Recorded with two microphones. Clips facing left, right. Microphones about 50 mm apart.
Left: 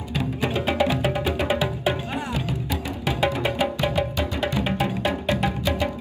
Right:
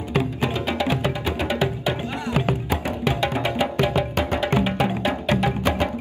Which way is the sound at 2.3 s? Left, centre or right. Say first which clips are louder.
Right 5 dB; right.